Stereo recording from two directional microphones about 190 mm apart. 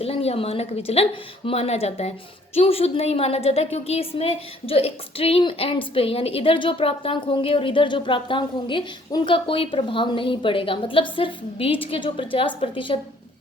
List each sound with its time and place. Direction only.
0.0 s a woman's voice: 30° left (ahead or behind)